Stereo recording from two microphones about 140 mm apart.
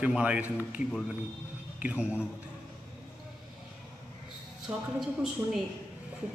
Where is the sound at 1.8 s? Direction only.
10° right (ahead or behind).